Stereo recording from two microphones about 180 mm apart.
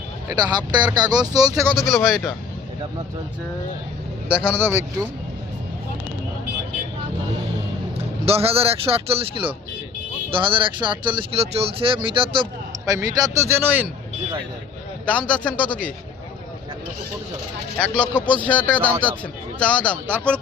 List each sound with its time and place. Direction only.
0.3 s speech: 20° right (ahead or behind)
1.7 s a man's voice: centre (ahead or behind)
4.3 s speech: 5° right (ahead or behind)
8.2 s speech: 35° right (ahead or behind); by 13.8 s 15° right (ahead or behind)
15.0 s a man's voice: 5° left (ahead or behind)
17.7 s a man's voice: 5° left (ahead or behind)
20.1 s speech: 10° right (ahead or behind)